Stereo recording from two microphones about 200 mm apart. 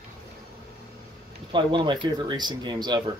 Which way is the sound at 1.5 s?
25° right (ahead or behind).